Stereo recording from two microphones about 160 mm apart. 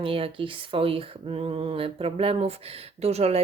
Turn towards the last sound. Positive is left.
turn(degrees=-40)  # may be behind; listen again after turning